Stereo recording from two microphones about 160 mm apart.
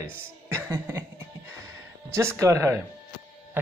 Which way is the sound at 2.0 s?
15° right (ahead or behind).